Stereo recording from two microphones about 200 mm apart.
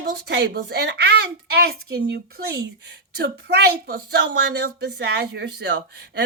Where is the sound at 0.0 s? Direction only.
55° right (ahead or behind).